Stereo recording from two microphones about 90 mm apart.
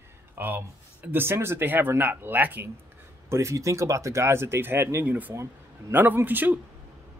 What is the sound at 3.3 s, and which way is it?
Speech, 30° right (ahead or behind).